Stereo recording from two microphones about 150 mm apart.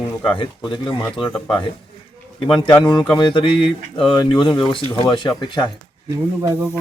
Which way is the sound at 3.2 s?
35° left (ahead or behind).